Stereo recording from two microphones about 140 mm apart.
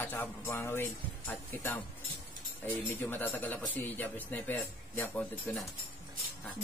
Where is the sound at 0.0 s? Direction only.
15° left (ahead or behind).